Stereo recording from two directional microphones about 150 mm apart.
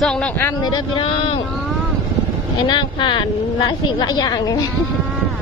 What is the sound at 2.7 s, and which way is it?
A woman's voice, 30° left (ahead or behind).